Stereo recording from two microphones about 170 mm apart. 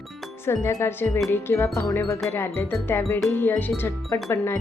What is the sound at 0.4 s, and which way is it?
Speech, 15° left (ahead or behind).